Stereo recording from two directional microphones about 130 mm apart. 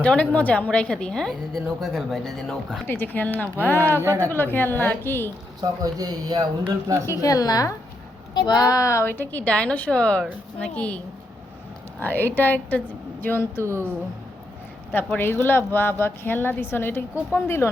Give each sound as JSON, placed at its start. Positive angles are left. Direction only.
{"t": 0.0, "sound": "a woman's voice", "side_deg": 10}
{"t": 2.8, "sound": "speech", "side_deg": 15}
{"t": 4.0, "sound": "speech", "side_deg": -20}
{"t": 4.3, "sound": "speech", "side_deg": 15}
{"t": 5.5, "sound": "speech", "side_deg": -30}
{"t": 7.1, "sound": "a woman's voice", "side_deg": 25}
{"t": 13.6, "sound": "speech", "side_deg": -20}
{"t": 14.9, "sound": "speech", "side_deg": 15}